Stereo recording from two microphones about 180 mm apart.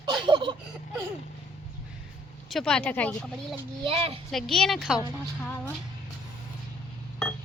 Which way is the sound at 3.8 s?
30° right (ahead or behind).